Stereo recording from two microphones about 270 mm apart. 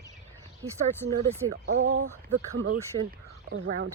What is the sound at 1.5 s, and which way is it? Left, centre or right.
Speech, right.